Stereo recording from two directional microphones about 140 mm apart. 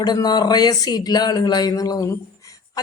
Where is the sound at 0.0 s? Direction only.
30° left (ahead or behind).